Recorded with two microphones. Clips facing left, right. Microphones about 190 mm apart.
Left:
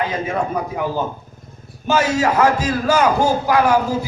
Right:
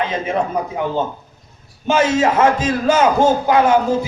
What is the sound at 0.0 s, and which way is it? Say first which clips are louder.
A man's voice: right 2 dB; 20° right (ahead or behind).